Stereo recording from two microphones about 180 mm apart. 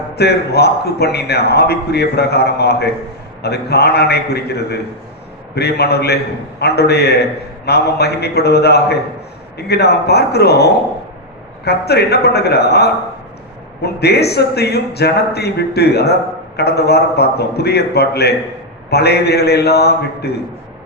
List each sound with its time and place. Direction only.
0.2 s a man's voice: 65° left (ahead or behind)